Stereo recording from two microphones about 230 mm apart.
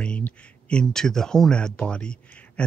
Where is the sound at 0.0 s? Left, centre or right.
Centre.